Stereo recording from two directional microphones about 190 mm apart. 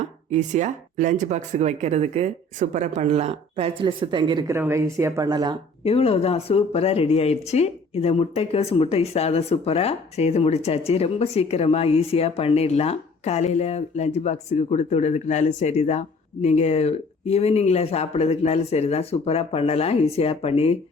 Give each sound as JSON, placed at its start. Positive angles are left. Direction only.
{"t": 0.3, "sound": "speech", "side_deg": -40}
{"t": 5.8, "sound": "speech", "side_deg": 30}